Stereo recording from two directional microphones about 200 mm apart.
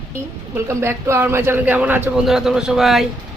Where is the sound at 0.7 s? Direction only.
15° right (ahead or behind).